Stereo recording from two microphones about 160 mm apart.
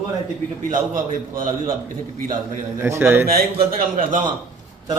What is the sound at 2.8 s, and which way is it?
Speech, 15° right (ahead or behind).